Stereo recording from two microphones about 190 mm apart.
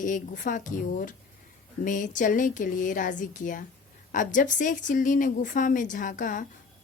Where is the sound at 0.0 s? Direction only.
45° left (ahead or behind).